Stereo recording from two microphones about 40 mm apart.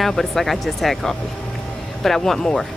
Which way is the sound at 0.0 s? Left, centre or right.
Centre.